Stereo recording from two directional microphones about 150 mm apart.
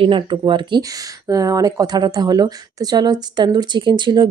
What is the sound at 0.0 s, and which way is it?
Speech, 35° right (ahead or behind).